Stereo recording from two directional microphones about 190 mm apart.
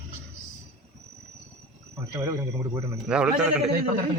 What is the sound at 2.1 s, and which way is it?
Speech, 15° right (ahead or behind).